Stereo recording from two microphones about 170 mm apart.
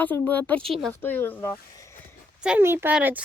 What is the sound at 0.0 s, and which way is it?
Speech, 10° left (ahead or behind).